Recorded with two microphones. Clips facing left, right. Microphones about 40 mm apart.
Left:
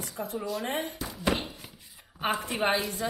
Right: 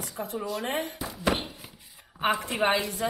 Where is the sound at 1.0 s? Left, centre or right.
Centre.